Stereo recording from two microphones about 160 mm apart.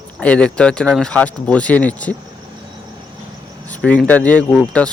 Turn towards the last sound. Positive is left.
turn(degrees=5)  # may be behind; listen again after turning